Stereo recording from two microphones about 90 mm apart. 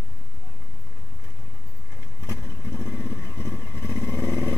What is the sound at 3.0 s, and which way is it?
Vehicle, 25° left (ahead or behind).